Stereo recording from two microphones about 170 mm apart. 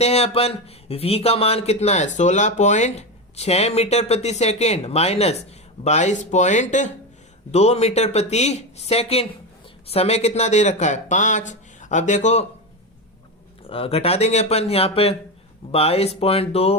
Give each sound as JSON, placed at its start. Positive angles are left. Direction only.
{"t": 0.0, "sound": "speech", "side_deg": 40}
{"t": 13.7, "sound": "speech", "side_deg": 35}